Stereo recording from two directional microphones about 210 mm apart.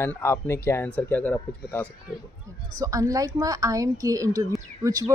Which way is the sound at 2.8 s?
15° right (ahead or behind).